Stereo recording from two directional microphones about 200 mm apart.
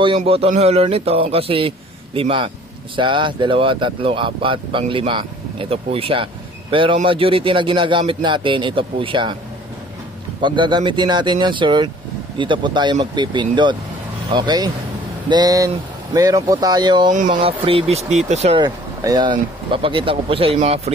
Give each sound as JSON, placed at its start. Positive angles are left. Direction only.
{"t": 0.2, "sound": "a man's voice", "side_deg": -35}
{"t": 10.4, "sound": "speech", "side_deg": -25}
{"t": 17.1, "sound": "speech", "side_deg": -40}
{"t": 18.6, "sound": "speech", "side_deg": -20}